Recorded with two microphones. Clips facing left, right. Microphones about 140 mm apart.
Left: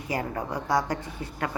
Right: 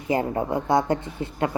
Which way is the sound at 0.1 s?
25° right (ahead or behind).